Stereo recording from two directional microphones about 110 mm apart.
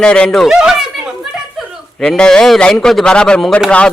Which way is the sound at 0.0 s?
10° left (ahead or behind).